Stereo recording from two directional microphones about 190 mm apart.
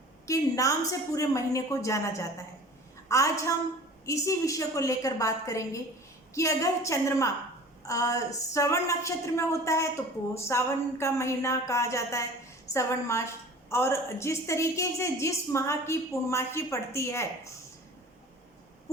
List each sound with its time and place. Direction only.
0.3 s a woman's voice: 15° left (ahead or behind)